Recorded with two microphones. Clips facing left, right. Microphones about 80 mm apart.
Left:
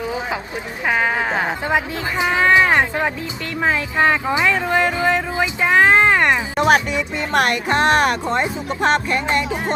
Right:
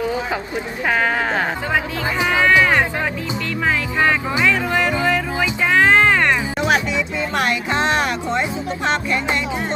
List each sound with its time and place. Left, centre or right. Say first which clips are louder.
0.9 s speech: even; centre
6.6 s speech: left 3 dB; left